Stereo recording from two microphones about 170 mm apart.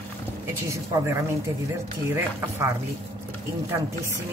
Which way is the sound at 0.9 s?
15° right (ahead or behind).